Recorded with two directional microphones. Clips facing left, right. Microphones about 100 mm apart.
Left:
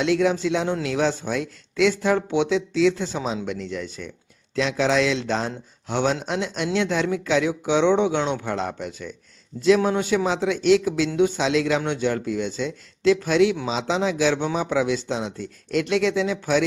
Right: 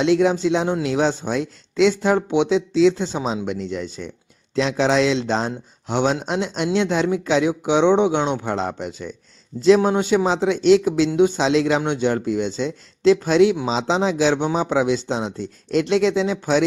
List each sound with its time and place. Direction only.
0.0 s a man's voice: 25° right (ahead or behind)